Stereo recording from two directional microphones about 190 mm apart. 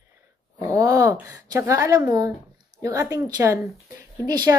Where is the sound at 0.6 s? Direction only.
15° right (ahead or behind).